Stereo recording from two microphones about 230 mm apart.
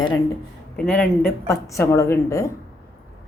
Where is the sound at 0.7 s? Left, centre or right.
Centre.